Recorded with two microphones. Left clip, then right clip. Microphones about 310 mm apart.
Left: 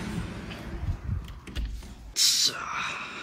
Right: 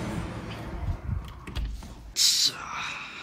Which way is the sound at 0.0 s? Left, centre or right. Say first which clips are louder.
Right 2 dB; right.